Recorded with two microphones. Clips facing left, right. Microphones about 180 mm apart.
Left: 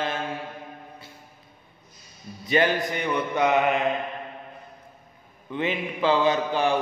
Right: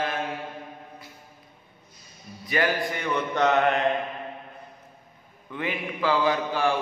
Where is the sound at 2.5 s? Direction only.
20° left (ahead or behind).